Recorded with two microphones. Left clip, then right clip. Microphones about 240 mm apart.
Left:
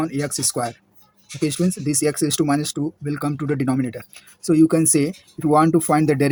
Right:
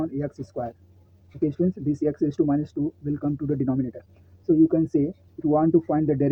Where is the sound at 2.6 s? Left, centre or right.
Left.